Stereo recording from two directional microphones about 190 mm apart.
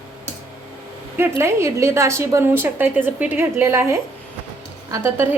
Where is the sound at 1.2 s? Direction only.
15° right (ahead or behind).